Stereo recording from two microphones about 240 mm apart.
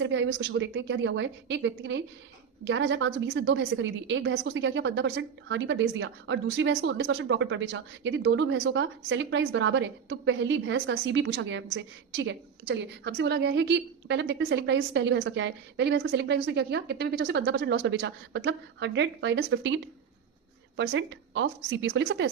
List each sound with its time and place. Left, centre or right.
0.0 s a woman's voice: right